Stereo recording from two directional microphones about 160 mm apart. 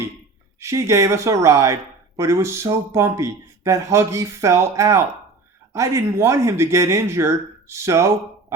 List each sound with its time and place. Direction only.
0.6 s speech: 20° right (ahead or behind)